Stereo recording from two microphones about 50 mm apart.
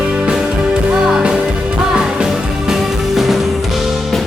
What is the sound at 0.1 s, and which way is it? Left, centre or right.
Music, centre.